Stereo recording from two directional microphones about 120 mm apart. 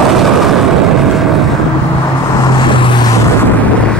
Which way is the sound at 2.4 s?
40° left (ahead or behind).